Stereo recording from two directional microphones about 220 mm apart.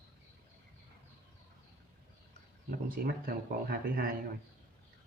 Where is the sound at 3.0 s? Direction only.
40° right (ahead or behind).